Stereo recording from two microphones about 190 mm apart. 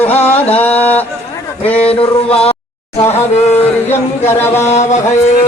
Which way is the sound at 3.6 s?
10° left (ahead or behind).